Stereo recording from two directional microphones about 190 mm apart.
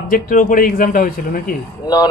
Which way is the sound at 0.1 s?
45° left (ahead or behind).